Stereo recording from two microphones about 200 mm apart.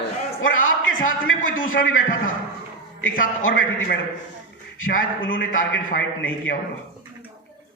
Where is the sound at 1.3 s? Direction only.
45° left (ahead or behind).